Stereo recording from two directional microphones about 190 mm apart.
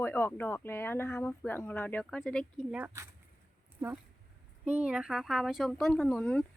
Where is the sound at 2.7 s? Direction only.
15° right (ahead or behind).